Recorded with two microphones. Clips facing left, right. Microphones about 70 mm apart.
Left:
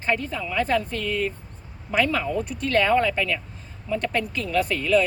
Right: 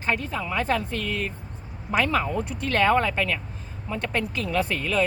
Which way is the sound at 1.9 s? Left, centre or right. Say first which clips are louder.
Left 1 dB; right.